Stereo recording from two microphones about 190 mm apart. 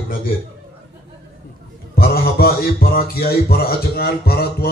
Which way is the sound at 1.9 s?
50° left (ahead or behind).